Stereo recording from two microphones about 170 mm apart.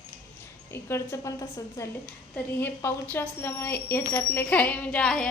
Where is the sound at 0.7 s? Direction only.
15° left (ahead or behind).